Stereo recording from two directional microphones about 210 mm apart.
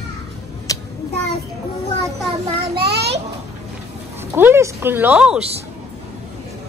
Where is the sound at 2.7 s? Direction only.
50° right (ahead or behind).